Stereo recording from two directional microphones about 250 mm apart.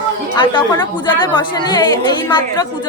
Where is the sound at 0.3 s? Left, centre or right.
Centre.